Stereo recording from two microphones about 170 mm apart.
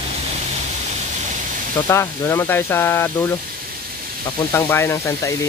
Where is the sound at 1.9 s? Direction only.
15° left (ahead or behind).